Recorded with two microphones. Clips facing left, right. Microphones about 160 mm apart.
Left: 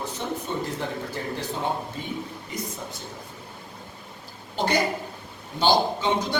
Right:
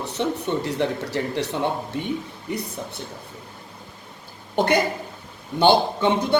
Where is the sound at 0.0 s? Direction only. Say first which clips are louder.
Right 6 dB; 70° right (ahead or behind).